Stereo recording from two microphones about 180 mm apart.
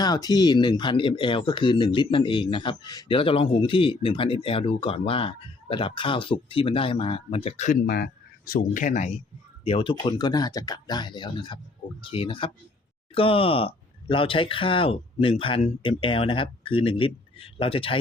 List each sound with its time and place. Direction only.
0.0 s speech: 20° left (ahead or behind); by 7.8 s 40° left (ahead or behind)
7.9 s speech: 60° left (ahead or behind); by 9.1 s 45° left (ahead or behind)
9.6 s speech: 30° left (ahead or behind)